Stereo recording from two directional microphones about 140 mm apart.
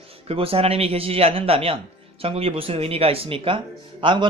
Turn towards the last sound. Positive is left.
turn(degrees=-35)  # may be behind; listen again after turning